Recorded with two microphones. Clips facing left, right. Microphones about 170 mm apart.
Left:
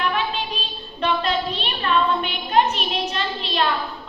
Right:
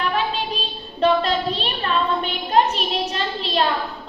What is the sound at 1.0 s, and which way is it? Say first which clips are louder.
Child singing: right 4 dB; 35° right (ahead or behind).